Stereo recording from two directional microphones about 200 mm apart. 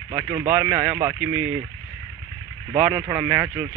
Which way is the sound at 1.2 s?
35° right (ahead or behind).